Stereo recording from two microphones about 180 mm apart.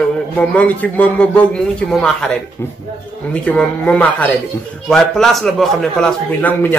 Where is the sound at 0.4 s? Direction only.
10° left (ahead or behind).